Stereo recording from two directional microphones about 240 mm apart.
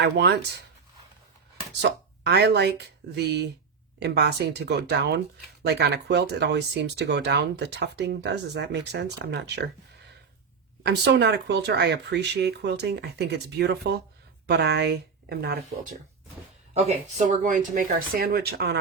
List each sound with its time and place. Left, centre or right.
0.0 s speech: right
1.8 s speech: right
10.8 s speech: right